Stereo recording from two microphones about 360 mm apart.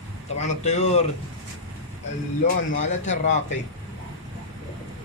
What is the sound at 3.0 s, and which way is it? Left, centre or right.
Speech, left.